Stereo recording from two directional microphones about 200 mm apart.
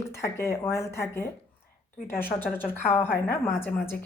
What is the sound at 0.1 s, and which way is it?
A woman's voice, 15° left (ahead or behind).